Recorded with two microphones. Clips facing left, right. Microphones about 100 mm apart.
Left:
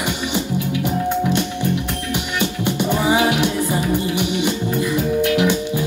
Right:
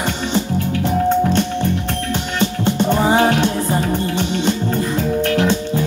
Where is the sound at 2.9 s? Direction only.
40° right (ahead or behind).